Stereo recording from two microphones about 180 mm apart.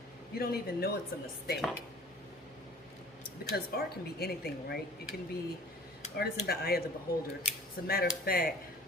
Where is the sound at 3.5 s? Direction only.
60° left (ahead or behind).